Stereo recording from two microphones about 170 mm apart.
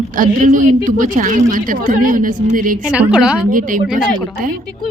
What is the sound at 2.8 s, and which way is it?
Speech, 10° right (ahead or behind).